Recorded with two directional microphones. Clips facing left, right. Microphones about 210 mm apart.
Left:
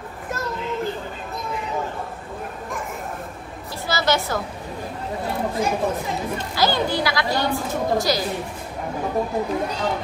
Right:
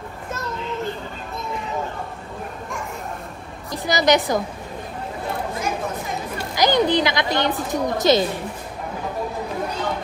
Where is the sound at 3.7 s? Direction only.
15° right (ahead or behind).